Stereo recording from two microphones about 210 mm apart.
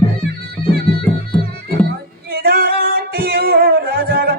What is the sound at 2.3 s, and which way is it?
Music, 45° right (ahead or behind).